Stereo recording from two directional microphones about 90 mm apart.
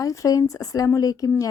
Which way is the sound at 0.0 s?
40° left (ahead or behind).